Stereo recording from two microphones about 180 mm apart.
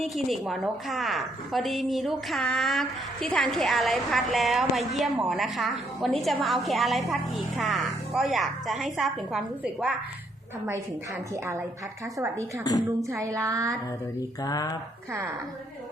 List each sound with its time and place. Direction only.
0.0 s a woman's voice: centre (ahead or behind)
12.1 s a sound: 15° right (ahead or behind)
14.2 s mantra: 20° left (ahead or behind)